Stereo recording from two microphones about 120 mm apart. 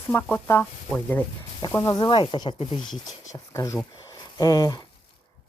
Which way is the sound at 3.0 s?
30° left (ahead or behind).